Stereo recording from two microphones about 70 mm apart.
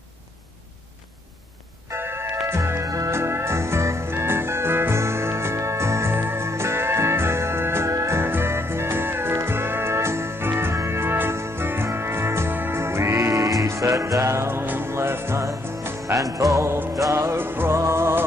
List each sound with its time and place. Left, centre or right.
1.9 s bell: right
2.5 s music: right
3.2 s music: right
16.9 s music: right